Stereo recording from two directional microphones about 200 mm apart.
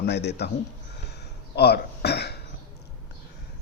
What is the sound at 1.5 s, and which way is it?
Speech, 55° left (ahead or behind).